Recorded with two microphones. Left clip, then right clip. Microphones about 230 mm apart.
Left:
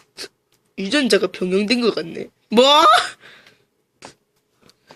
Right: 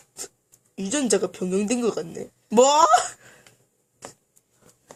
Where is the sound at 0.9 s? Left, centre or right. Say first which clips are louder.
Left 6 dB; centre.